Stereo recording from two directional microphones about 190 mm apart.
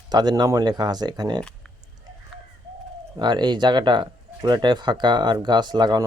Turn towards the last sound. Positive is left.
turn(degrees=-20)  # may be behind; listen again after turning